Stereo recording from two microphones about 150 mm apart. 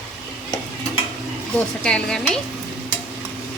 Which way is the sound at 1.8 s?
5° left (ahead or behind).